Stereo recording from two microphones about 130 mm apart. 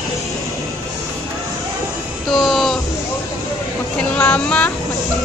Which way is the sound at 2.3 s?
Centre (ahead or behind).